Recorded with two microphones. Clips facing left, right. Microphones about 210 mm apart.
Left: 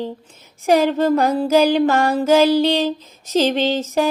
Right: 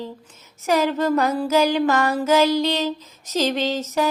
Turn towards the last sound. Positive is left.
turn(degrees=30)  # may be behind; listen again after turning